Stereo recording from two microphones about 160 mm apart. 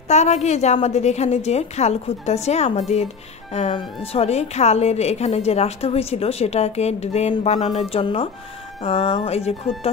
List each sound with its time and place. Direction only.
0.1 s a woman's voice: 45° left (ahead or behind)